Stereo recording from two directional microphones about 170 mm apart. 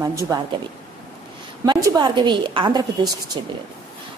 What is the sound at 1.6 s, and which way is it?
A woman's voice, 25° right (ahead or behind).